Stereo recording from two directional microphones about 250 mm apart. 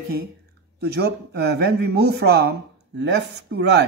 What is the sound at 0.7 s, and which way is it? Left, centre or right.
Speech, right.